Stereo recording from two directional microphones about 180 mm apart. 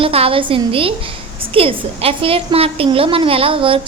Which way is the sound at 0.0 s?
30° right (ahead or behind).